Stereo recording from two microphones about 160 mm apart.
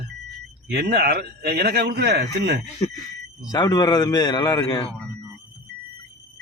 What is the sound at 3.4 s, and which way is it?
A man's voice, 25° left (ahead or behind).